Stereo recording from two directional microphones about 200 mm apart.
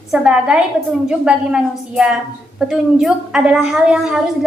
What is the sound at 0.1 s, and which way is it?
A woman's voice, 5° right (ahead or behind).